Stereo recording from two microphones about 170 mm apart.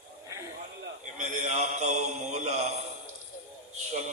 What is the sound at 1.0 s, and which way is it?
Mantra, 45° right (ahead or behind).